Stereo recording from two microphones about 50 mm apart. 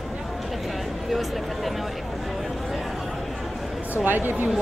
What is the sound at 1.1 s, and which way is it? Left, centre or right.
Speech, centre.